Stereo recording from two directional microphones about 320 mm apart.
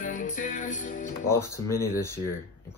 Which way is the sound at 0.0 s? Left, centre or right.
Left.